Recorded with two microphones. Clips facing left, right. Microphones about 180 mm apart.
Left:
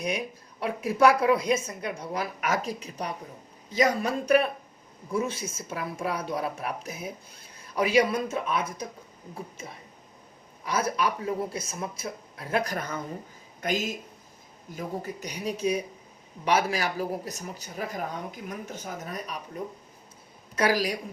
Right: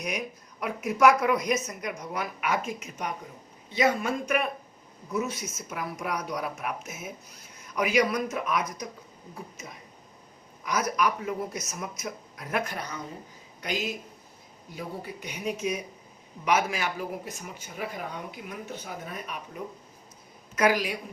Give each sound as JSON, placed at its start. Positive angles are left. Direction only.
{"t": 0.6, "sound": "speech", "side_deg": 30}
{"t": 12.7, "sound": "a man's voice", "side_deg": 50}
{"t": 20.6, "sound": "speech", "side_deg": 35}